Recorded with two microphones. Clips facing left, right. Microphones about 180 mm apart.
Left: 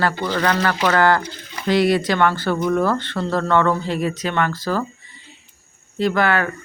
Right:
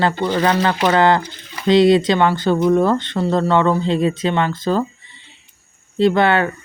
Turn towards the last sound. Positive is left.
turn(degrees=-25)  # may be behind; listen again after turning